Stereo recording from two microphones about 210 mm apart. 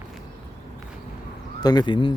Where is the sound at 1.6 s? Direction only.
20° left (ahead or behind).